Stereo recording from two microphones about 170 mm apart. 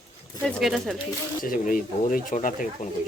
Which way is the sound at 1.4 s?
55° left (ahead or behind).